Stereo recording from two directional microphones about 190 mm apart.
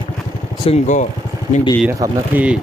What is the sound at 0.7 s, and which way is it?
Speech, 40° left (ahead or behind).